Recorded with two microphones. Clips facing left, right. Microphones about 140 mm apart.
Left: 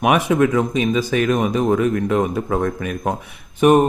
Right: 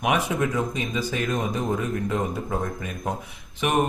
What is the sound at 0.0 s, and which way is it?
Speech, 75° left (ahead or behind).